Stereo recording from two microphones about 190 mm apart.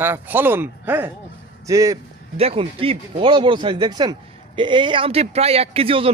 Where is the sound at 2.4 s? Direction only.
30° right (ahead or behind).